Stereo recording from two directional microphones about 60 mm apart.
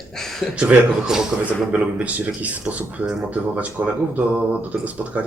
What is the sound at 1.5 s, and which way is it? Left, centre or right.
Speech, right.